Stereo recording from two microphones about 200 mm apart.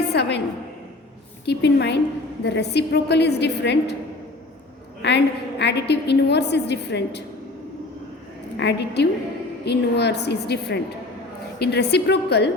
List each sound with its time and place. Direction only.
0.1 s a sound: 60° left (ahead or behind)
1.5 s a woman's voice: 55° left (ahead or behind)
5.0 s a woman's voice: 60° left (ahead or behind)
8.5 s a woman's voice: 55° left (ahead or behind)